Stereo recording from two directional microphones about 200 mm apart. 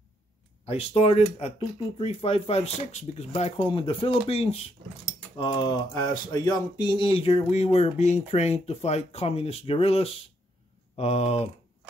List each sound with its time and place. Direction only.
0.7 s speech: 30° left (ahead or behind)